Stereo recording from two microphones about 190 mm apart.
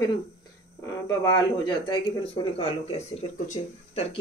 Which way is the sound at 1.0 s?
20° left (ahead or behind).